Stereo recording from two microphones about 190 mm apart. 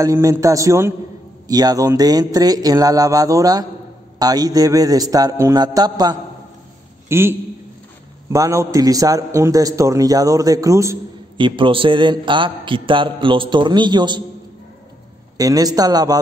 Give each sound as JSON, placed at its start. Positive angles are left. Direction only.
{"t": 0.0, "sound": "a man's voice", "side_deg": -15}
{"t": 15.3, "sound": "a man's voice", "side_deg": -20}